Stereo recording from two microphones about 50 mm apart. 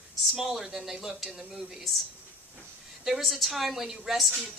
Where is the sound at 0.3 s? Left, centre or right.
Centre.